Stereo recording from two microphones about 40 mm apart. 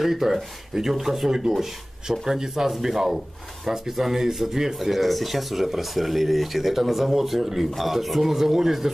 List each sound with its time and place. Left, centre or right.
0.0 s speech: centre